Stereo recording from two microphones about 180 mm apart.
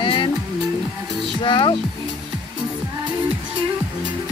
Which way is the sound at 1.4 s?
25° left (ahead or behind).